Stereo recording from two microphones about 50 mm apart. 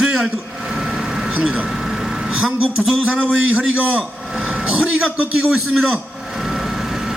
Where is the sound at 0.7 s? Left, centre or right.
Centre.